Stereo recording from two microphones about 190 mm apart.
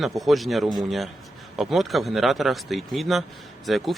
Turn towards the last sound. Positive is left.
turn(degrees=0)  # may be behind; listen again after turning